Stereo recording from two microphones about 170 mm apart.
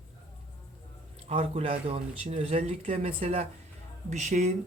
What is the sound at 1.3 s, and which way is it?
Speech, 35° right (ahead or behind).